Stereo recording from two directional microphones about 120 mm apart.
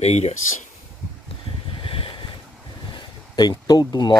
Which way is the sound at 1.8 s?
50° left (ahead or behind).